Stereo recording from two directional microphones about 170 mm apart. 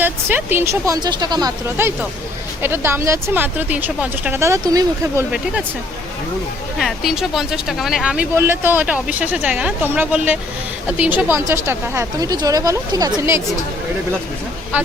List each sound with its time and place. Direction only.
0.0 s speech: 10° right (ahead or behind)
6.7 s speech: centre (ahead or behind); by 13.4 s 20° right (ahead or behind)